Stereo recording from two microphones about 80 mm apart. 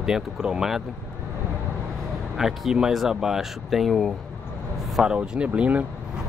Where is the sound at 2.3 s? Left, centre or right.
Centre.